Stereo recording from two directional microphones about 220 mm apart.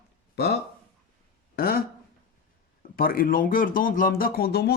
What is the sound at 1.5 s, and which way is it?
Speech, 40° left (ahead or behind).